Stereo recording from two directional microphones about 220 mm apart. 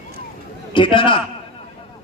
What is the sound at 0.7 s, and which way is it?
Speech, 20° left (ahead or behind).